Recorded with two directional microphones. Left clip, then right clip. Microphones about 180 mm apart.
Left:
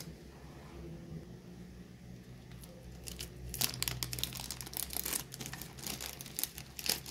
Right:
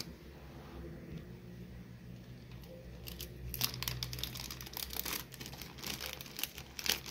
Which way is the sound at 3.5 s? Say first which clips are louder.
Left 1 dB; 25° left (ahead or behind).